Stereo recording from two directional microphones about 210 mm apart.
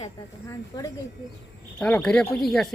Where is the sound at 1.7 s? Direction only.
5° left (ahead or behind).